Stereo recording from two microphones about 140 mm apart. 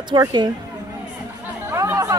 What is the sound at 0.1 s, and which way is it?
Speech, 30° right (ahead or behind).